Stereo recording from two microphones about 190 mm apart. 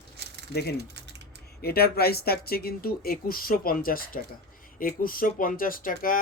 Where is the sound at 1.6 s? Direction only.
55° left (ahead or behind).